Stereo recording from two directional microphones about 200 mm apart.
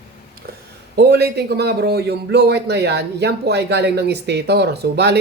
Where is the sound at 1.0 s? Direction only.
55° right (ahead or behind).